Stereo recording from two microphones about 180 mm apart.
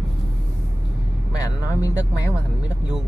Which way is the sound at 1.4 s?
20° left (ahead or behind).